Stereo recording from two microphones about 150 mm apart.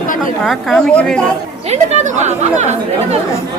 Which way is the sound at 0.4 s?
5° left (ahead or behind).